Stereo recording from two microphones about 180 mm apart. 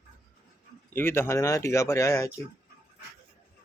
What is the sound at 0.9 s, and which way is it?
Speech, 10° left (ahead or behind).